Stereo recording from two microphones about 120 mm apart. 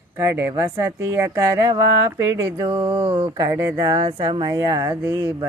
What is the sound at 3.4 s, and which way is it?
Speech, 25° right (ahead or behind).